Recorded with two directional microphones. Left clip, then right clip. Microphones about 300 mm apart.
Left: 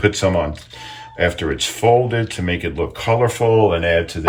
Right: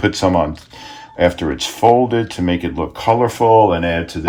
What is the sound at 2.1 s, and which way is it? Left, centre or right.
Speech, right.